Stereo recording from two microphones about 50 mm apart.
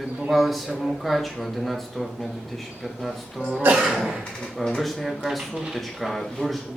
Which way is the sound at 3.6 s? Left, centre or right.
Right.